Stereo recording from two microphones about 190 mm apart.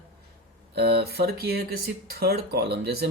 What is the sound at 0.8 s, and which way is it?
Speech, 55° right (ahead or behind).